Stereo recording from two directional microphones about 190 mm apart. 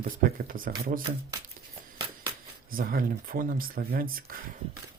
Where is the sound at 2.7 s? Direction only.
50° right (ahead or behind).